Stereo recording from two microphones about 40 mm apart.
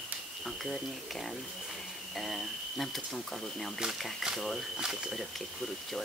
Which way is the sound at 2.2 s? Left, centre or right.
Centre.